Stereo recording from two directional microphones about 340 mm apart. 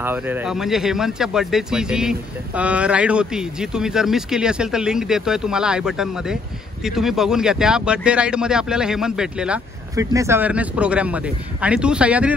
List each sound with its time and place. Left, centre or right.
0.0 s speech: centre